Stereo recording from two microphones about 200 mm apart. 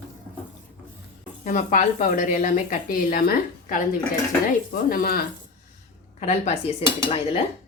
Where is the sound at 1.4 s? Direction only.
40° left (ahead or behind).